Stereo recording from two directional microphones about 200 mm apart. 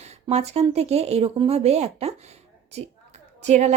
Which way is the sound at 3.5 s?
35° right (ahead or behind).